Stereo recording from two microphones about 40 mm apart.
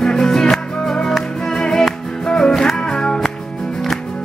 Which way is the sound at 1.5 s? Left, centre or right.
Centre.